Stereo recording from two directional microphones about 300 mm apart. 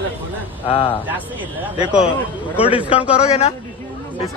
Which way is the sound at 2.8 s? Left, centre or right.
Centre.